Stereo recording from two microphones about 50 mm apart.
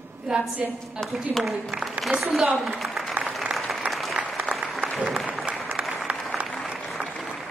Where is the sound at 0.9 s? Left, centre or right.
Centre.